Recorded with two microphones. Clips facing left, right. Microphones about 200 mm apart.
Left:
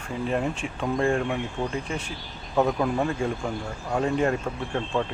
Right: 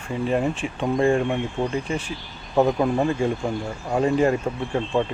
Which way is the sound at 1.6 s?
30° right (ahead or behind).